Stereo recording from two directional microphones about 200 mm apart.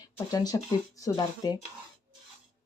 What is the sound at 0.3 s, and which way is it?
Speech, 20° left (ahead or behind).